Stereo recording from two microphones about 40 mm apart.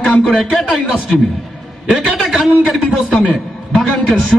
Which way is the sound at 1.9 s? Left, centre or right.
Centre.